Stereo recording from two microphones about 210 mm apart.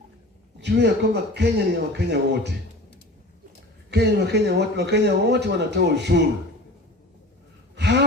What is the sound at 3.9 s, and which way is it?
Speech, 55° right (ahead or behind).